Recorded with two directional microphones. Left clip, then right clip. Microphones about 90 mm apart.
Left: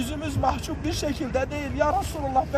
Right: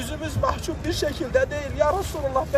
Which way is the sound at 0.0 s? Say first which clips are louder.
Even; 40° right (ahead or behind).